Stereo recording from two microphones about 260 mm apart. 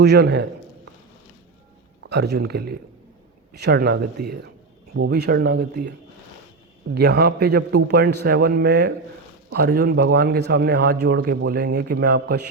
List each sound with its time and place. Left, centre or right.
0.0 s speech: right
2.0 s speech: right
6.9 s speech: right